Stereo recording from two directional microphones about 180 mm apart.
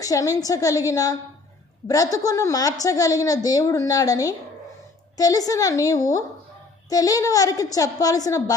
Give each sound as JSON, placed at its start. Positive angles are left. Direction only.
{"t": 0.0, "sound": "a woman's voice", "side_deg": 20}